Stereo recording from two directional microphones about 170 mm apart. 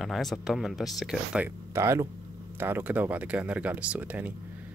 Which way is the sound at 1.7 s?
15° right (ahead or behind).